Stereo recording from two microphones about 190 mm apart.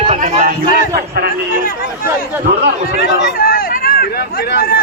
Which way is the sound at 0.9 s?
55° right (ahead or behind).